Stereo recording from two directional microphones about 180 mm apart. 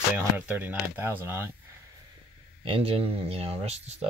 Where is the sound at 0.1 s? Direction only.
10° right (ahead or behind).